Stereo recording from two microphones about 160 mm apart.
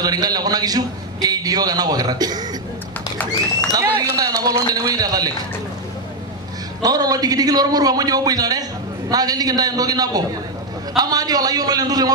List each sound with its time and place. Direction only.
0.0 s a man's voice: 25° right (ahead or behind)
3.7 s a man's voice: 25° right (ahead or behind)
6.8 s a man's voice: 25° right (ahead or behind)